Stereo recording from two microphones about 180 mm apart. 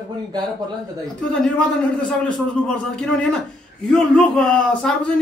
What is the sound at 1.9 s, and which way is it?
A man's voice, 5° left (ahead or behind).